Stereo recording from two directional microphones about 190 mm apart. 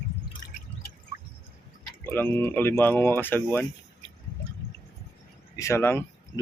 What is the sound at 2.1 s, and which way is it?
Speech, 10° left (ahead or behind).